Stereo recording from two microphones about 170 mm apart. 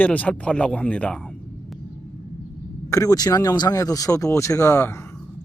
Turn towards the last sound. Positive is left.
turn(degrees=15)  # may be behind; listen again after turning